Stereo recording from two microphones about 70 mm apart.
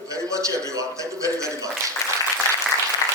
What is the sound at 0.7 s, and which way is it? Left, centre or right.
A man's voice, right.